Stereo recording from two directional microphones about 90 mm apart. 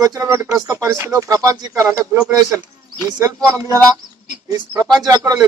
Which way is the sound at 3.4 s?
40° right (ahead or behind).